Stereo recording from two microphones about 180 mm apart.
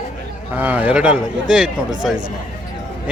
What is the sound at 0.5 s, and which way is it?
A man's voice, 10° right (ahead or behind).